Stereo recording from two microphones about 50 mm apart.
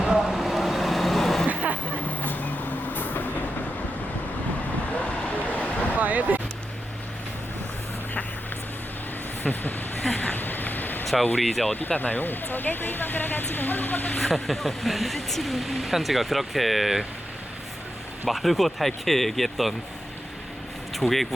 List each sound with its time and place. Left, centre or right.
0.0 s vehicle: centre
2.0 s vehicle: left
5.0 s vehicle: left
6.0 s a sound: right
9.4 s vehicle: left
10.2 s a sound: left
11.0 s vehicle: centre
11.3 s speech: centre
11.9 s speech: left
14.2 s speech: centre
18.3 s speech: centre
21.0 s speech: left